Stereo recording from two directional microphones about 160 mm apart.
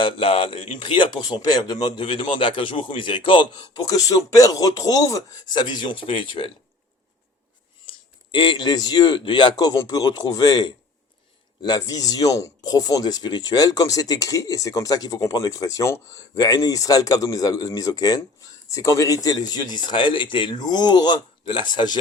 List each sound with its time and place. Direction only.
0.0 s speech: 35° left (ahead or behind)
8.3 s speech: 30° left (ahead or behind)